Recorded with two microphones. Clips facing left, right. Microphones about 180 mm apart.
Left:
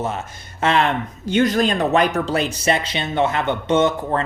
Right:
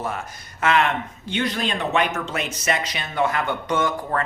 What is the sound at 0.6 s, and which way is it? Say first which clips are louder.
Speech: left 2 dB; 30° left (ahead or behind).